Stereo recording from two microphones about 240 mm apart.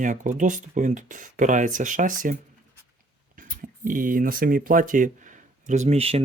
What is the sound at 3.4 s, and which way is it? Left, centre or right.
Speech, right.